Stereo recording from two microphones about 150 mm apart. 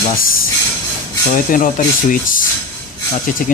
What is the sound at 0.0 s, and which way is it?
Speech, 75° left (ahead or behind).